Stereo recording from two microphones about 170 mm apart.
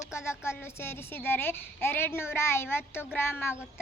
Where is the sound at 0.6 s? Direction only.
15° left (ahead or behind).